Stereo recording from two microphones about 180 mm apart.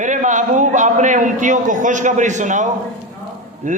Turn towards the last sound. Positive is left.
turn(degrees=-45)  # may be behind; listen again after turning